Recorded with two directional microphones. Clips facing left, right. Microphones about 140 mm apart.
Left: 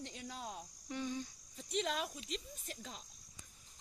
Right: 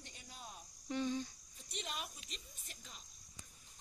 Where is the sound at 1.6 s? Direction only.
90° left.